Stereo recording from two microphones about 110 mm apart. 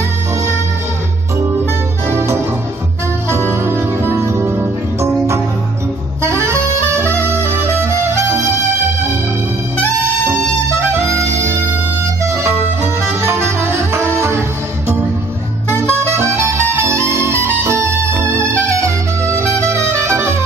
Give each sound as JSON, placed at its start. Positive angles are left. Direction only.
{"t": 3.5, "sound": "music", "side_deg": -20}
{"t": 6.4, "sound": "music", "side_deg": -25}
{"t": 10.9, "sound": "music", "side_deg": -25}
{"t": 15.8, "sound": "music", "side_deg": 15}
{"t": 16.2, "sound": "music", "side_deg": -25}